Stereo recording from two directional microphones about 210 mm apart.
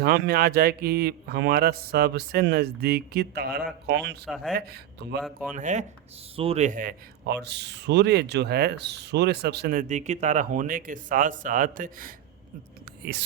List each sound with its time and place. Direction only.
0.0 s speech: 45° right (ahead or behind)
5.5 s a man's voice: 35° right (ahead or behind)